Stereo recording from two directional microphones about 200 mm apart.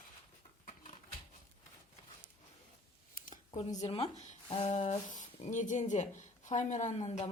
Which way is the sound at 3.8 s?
30° left (ahead or behind).